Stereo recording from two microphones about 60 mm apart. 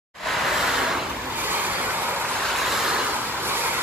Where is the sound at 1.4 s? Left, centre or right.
Right.